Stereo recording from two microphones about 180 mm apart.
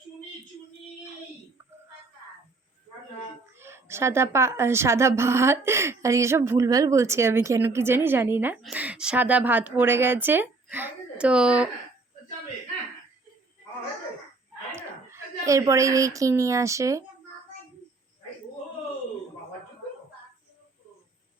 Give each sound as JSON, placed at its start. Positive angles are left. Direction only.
{"t": 3.6, "sound": "a woman's voice", "side_deg": -15}
{"t": 14.8, "sound": "a woman's voice", "side_deg": -15}